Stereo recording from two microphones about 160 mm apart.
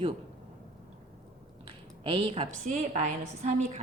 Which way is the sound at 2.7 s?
50° right (ahead or behind).